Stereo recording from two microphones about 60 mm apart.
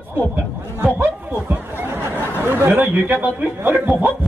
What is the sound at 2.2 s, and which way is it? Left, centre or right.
A man's voice, right.